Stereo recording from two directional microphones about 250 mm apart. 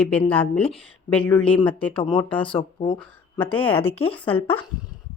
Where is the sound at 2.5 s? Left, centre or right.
Left.